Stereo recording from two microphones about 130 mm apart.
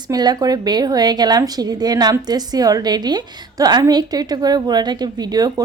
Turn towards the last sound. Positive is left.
turn(degrees=-30)  # may be behind; listen again after turning